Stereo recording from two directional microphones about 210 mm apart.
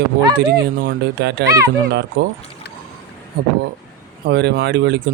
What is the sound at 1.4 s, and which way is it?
Speech, 15° right (ahead or behind).